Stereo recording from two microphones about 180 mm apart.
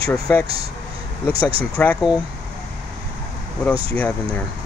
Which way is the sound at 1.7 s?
10° left (ahead or behind).